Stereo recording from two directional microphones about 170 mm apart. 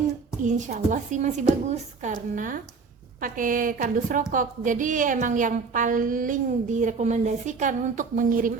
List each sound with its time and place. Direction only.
0.4 s a woman's voice: 45° right (ahead or behind)